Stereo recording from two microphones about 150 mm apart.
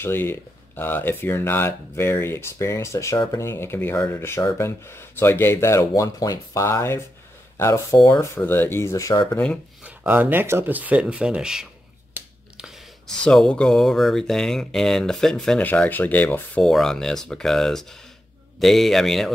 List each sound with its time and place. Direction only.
0.0 s speech: 15° left (ahead or behind)
9.8 s speech: 10° right (ahead or behind)